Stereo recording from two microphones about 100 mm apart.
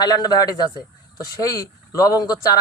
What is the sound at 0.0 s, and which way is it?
Speech, 40° left (ahead or behind).